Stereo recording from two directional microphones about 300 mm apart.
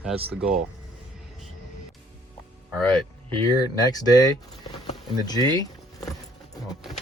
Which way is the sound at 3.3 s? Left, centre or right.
Centre.